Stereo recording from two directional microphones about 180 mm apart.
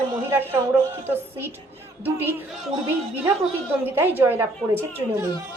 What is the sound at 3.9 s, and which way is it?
Speech, 10° right (ahead or behind).